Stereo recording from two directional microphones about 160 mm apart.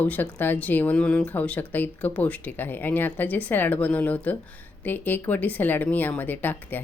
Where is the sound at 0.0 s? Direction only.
10° left (ahead or behind).